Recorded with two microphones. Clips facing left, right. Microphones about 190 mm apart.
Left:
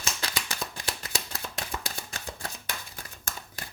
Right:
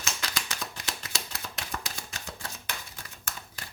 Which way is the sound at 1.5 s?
35° left (ahead or behind).